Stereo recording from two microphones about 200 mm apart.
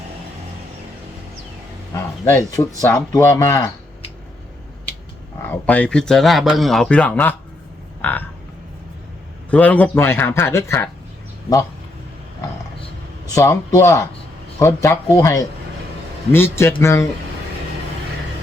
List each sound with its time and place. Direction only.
2.2 s speech: 15° left (ahead or behind)
5.5 s speech: 5° left (ahead or behind)
9.5 s speech: 5° left (ahead or behind)
13.3 s speech: 15° left (ahead or behind)